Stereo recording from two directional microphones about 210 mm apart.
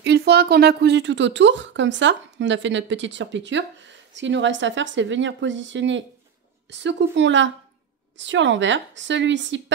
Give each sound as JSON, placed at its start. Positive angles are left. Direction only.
{"t": 0.0, "sound": "speech", "side_deg": -50}